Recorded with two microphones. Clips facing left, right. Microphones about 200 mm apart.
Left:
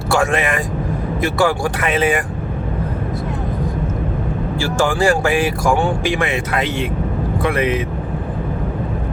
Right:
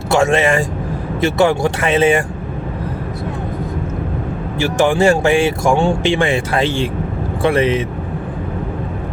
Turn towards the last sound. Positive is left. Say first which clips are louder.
# right 3 dB
turn(degrees=-30)  # may be behind; listen again after turning